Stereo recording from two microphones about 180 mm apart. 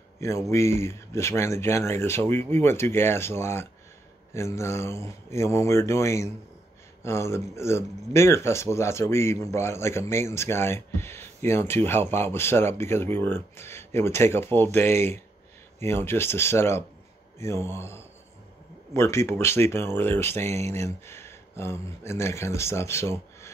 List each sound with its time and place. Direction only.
0.5 s speech: 15° left (ahead or behind)